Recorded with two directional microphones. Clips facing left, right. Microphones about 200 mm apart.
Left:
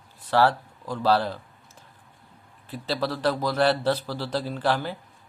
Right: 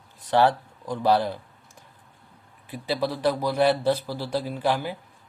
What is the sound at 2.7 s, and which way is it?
Speech, 15° right (ahead or behind).